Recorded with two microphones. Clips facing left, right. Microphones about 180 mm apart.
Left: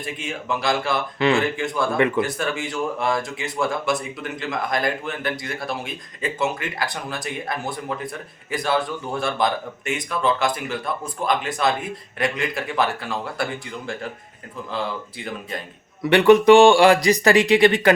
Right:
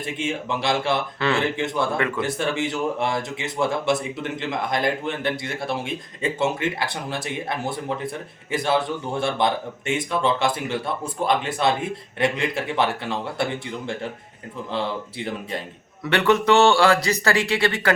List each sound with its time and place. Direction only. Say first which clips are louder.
0.0 s speech: right 3 dB; 25° right (ahead or behind)
16.0 s a man's voice: left 6 dB; 15° left (ahead or behind)